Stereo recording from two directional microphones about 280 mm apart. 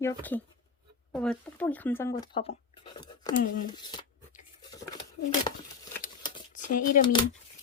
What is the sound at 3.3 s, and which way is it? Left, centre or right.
Speech, left.